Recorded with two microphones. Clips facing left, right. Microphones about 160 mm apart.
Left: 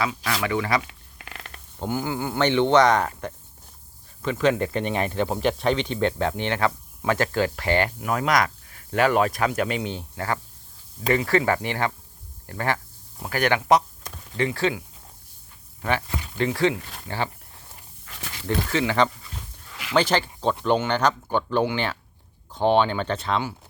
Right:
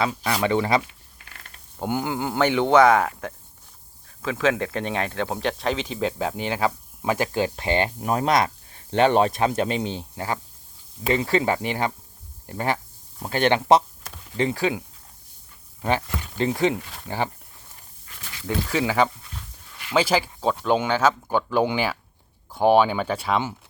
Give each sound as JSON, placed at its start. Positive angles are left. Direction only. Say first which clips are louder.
{"t": 0.3, "sound": "speech", "louder": "right 4 dB", "side_deg": -20}
{"t": 0.9, "sound": "mechanisms", "louder": "left 6 dB", "side_deg": 90}
{"t": 1.8, "sound": "speech", "louder": "right 1 dB", "side_deg": -20}
{"t": 16.4, "sound": "speech", "louder": "even", "side_deg": -20}
{"t": 18.4, "sound": "speech", "louder": "even", "side_deg": -10}